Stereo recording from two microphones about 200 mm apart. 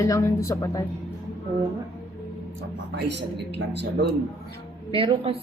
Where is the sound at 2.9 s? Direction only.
60° right (ahead or behind).